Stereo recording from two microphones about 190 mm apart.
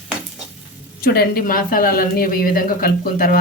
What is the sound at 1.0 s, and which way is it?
Speech, 55° left (ahead or behind).